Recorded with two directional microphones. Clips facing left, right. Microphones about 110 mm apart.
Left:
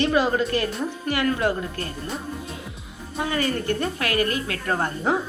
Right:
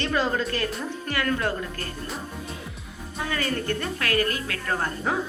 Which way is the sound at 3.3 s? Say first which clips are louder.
Left 3 dB; 25° left (ahead or behind).